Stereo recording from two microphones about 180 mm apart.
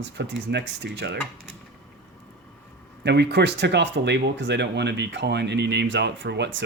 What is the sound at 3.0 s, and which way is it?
Speech, 70° right (ahead or behind).